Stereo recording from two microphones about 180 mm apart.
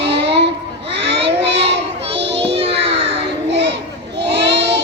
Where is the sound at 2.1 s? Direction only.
75° right (ahead or behind).